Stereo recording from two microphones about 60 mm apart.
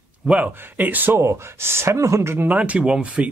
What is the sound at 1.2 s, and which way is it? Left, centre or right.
Speech, right.